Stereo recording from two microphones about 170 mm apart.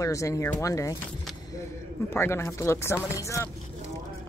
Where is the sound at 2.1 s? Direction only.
15° left (ahead or behind).